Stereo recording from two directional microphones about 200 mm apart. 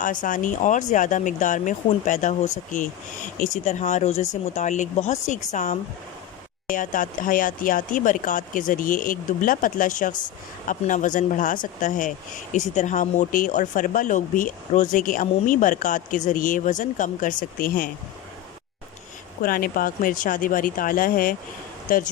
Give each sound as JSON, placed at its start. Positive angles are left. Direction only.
{"t": 0.0, "sound": "speech", "side_deg": 40}
{"t": 19.4, "sound": "speech", "side_deg": 45}